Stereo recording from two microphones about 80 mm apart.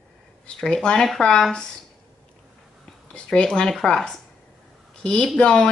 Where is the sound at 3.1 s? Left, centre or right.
Centre.